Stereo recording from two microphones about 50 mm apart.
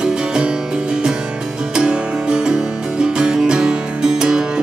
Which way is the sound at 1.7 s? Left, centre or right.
Centre.